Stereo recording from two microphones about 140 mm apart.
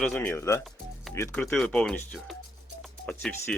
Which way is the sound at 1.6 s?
5° left (ahead or behind).